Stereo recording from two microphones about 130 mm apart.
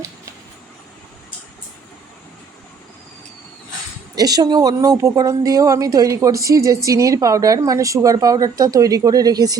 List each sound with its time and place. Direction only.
4.1 s a woman's voice: 30° right (ahead or behind)